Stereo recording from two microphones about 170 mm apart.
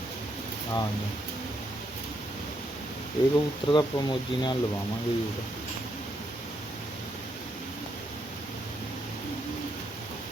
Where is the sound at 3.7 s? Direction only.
25° left (ahead or behind).